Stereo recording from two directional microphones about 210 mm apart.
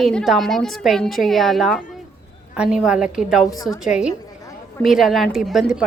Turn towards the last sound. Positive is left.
turn(degrees=0)  # may be behind; listen again after turning